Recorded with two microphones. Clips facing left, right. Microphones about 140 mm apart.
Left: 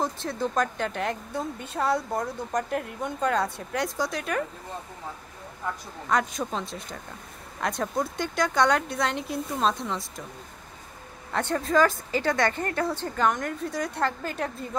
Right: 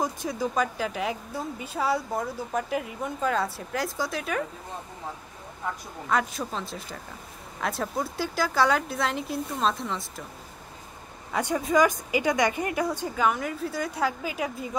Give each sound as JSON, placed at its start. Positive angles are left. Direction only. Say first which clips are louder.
{"t": 0.3, "sound": "a woman's voice", "louder": "left 1 dB", "side_deg": -5}
{"t": 6.0, "sound": "a woman's voice", "louder": "left 1 dB", "side_deg": 0}
{"t": 11.3, "sound": "a woman's voice", "louder": "even", "side_deg": -5}